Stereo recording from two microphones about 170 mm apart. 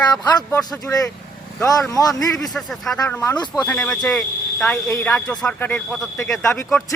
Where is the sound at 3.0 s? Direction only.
10° left (ahead or behind).